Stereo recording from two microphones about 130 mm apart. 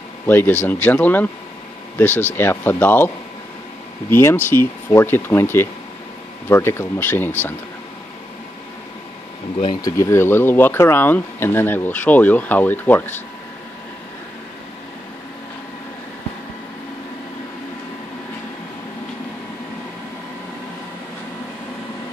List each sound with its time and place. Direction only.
0.3 s speech: 15° left (ahead or behind)
4.1 s speech: 20° left (ahead or behind)
9.8 s speech: 25° left (ahead or behind)